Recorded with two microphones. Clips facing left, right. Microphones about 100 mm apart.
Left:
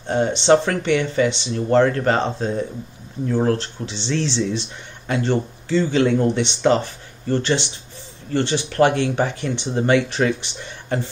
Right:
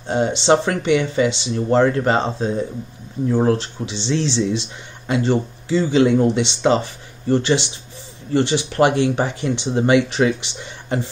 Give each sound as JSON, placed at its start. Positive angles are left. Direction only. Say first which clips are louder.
{"t": 0.1, "sound": "speech", "louder": "even", "side_deg": -10}